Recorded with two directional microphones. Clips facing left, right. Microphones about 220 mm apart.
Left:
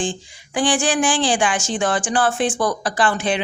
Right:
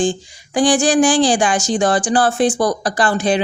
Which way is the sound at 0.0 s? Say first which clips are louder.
Right 6 dB; 40° right (ahead or behind).